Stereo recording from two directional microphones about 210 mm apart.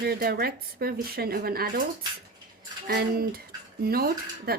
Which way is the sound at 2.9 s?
50° right (ahead or behind).